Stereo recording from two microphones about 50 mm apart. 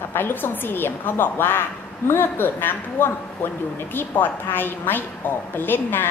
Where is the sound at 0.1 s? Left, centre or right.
Left.